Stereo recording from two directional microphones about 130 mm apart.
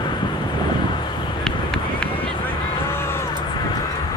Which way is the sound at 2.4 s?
20° left (ahead or behind).